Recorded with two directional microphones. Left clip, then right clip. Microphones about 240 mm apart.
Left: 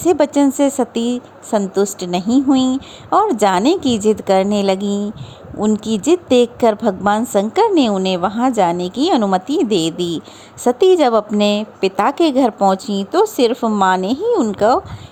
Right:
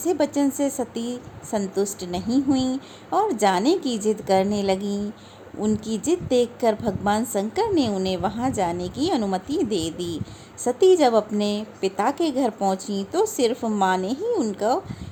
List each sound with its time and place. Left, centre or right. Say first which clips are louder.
0.0 s a woman's voice: left 8 dB; left